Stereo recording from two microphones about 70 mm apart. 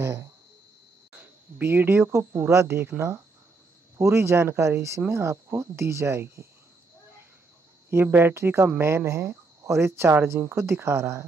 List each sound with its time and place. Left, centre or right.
0.0 s a sound: right
1.6 s speech: right
4.0 s speech: right
7.9 s speech: right